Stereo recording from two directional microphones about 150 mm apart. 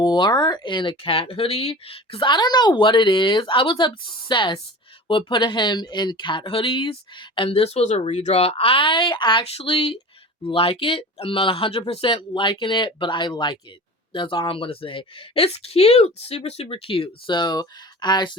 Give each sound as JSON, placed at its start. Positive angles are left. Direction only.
{"t": 0.0, "sound": "speech", "side_deg": 30}